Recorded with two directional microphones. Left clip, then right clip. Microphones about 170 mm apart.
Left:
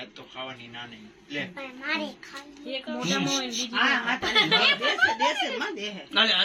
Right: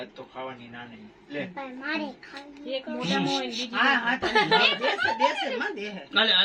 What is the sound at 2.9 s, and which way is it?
Speech, 20° right (ahead or behind).